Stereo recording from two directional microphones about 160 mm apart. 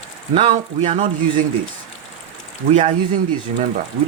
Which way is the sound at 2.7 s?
45° right (ahead or behind).